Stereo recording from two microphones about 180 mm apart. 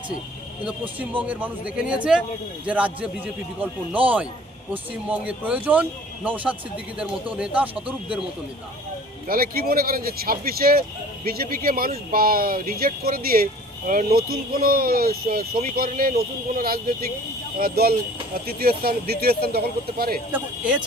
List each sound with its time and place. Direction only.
0.6 s speech: 10° right (ahead or behind)
9.2 s speech: 55° right (ahead or behind)
20.3 s speech: 5° right (ahead or behind)